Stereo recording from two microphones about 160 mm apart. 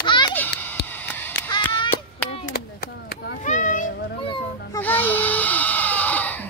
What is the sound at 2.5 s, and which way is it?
Chop, 80° left.